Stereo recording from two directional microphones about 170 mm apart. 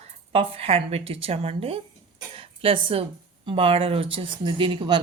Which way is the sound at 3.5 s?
30° right (ahead or behind).